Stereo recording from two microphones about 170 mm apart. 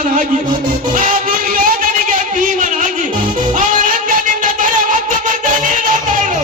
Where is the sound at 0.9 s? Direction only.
55° right (ahead or behind).